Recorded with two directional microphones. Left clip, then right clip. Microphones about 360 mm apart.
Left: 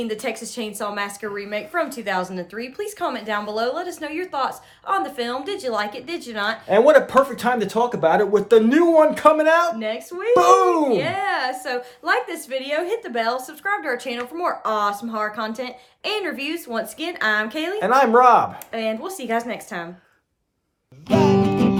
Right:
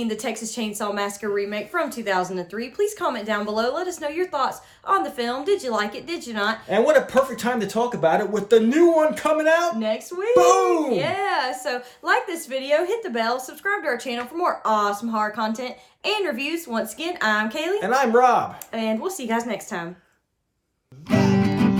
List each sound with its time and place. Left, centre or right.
0.0 s speech: centre
6.7 s speech: centre
9.7 s speech: centre
17.7 s speech: centre
18.7 s speech: centre
21.1 s music: centre
21.4 s music: right